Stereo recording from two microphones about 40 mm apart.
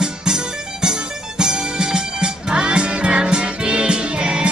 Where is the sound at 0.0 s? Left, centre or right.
Centre.